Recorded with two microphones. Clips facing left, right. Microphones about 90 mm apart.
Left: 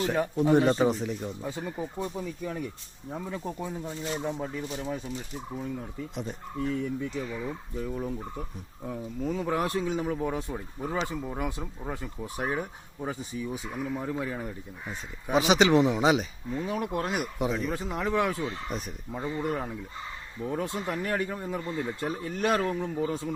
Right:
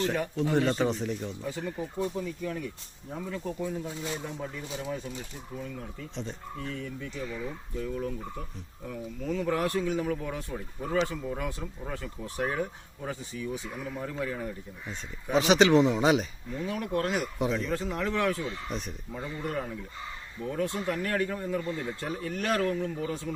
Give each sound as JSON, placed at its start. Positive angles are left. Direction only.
{"t": 0.3, "sound": "speech", "side_deg": 20}
{"t": 0.9, "sound": "speech", "side_deg": 5}
{"t": 1.4, "sound": "speech", "side_deg": 20}
{"t": 6.1, "sound": "speech", "side_deg": 10}
{"t": 15.4, "sound": "speech", "side_deg": 5}
{"t": 16.6, "sound": "speech", "side_deg": 20}
{"t": 17.3, "sound": "speech", "side_deg": 5}
{"t": 18.7, "sound": "speech", "side_deg": 5}
{"t": 19.1, "sound": "speech", "side_deg": 20}